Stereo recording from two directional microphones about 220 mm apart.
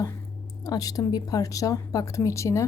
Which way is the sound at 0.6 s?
15° left (ahead or behind).